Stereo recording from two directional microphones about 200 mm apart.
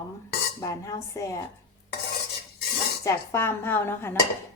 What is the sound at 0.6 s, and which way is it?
Speech, 15° left (ahead or behind).